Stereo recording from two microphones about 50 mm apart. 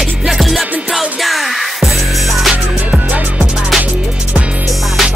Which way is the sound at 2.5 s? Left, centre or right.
Right.